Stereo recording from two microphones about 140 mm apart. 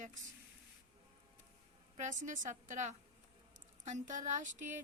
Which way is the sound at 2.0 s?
60° right (ahead or behind).